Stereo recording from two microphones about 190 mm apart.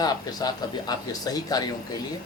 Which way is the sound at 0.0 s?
20° left (ahead or behind).